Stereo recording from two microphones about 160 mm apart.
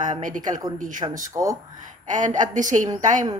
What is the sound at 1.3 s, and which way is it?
Speech, 20° right (ahead or behind).